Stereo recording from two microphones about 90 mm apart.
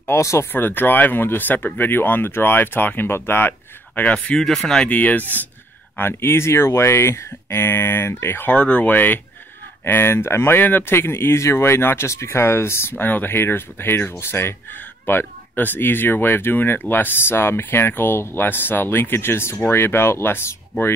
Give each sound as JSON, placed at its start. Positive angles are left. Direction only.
{"t": 0.0, "sound": "speech", "side_deg": 30}
{"t": 4.8, "sound": "speech", "side_deg": 20}
{"t": 8.5, "sound": "speech", "side_deg": 15}